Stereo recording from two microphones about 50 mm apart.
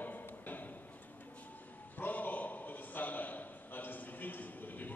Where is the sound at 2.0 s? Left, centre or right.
Left.